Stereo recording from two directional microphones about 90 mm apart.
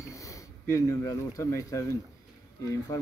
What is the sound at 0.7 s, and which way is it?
Speech, 35° left (ahead or behind).